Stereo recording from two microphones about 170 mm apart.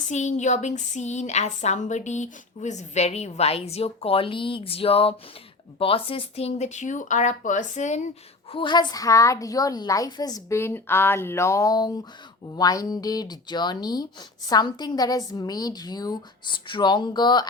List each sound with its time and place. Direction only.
0.1 s speech: 45° left (ahead or behind)
8.4 s speech: 30° left (ahead or behind)